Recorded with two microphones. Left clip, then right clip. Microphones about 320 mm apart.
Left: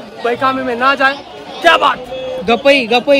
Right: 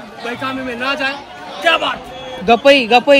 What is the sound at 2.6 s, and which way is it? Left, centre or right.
Speech, right.